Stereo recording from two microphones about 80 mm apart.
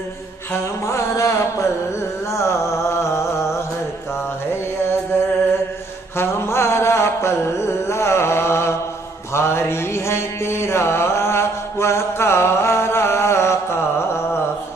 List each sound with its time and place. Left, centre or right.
0.5 s music: left
6.1 s music: left
9.3 s mantra: left